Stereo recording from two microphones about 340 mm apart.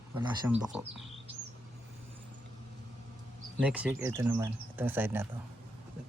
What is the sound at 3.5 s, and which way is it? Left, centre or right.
Speech, centre.